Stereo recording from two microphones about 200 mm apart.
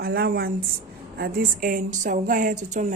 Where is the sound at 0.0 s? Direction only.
50° right (ahead or behind).